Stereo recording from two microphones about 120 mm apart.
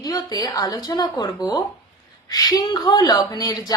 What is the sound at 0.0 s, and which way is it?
A woman's voice, 30° left (ahead or behind).